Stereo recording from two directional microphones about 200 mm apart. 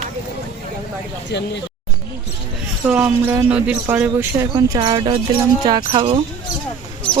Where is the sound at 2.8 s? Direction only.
10° right (ahead or behind).